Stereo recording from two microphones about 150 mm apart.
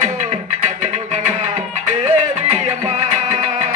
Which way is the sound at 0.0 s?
50° right (ahead or behind).